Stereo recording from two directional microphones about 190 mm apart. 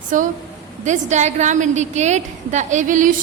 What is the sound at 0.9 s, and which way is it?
A woman's voice, 40° right (ahead or behind).